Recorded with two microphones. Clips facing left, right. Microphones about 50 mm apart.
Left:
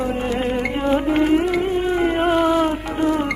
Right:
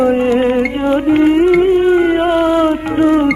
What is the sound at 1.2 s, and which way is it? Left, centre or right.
Music, right.